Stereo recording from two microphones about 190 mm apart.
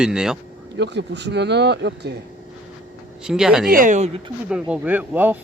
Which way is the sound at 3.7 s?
45° right (ahead or behind).